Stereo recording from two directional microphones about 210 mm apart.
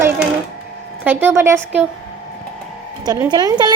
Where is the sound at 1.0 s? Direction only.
10° right (ahead or behind).